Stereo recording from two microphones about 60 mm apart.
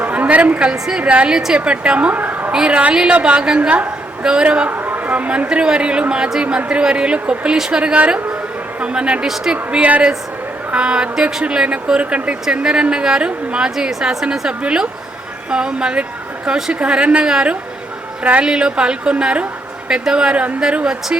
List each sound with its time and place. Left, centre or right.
0.0 s a sound: right
0.7 s a woman's voice: centre
2.5 s a woman's voice: centre
4.7 s a woman's voice: right; by 21.2 s centre